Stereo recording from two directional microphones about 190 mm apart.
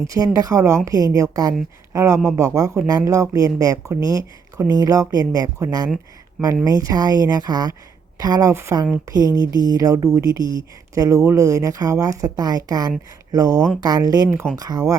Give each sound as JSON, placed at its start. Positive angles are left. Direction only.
{"t": 0.3, "sound": "speech", "side_deg": -15}